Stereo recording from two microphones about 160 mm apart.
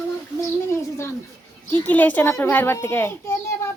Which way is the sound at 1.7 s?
10° left (ahead or behind).